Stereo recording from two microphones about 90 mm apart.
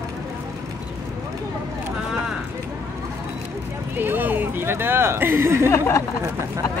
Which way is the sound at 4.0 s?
20° right (ahead or behind).